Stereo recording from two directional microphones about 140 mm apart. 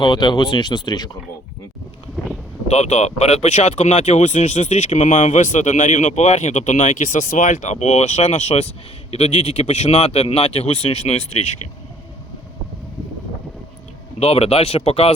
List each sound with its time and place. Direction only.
0.0 s speech: 35° left (ahead or behind)
2.6 s speech: 50° left (ahead or behind)
14.2 s speech: 45° left (ahead or behind)